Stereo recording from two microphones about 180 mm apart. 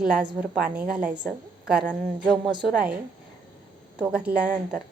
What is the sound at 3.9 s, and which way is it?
Speech, 5° right (ahead or behind).